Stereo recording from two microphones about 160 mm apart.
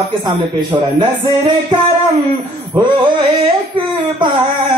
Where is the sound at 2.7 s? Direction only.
30° right (ahead or behind).